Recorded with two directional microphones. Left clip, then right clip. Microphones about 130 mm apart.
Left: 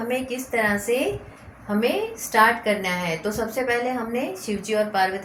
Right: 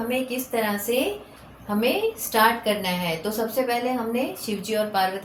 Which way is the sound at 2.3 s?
40° left (ahead or behind).